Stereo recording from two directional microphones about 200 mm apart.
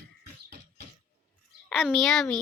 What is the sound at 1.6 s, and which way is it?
Speech, centre (ahead or behind).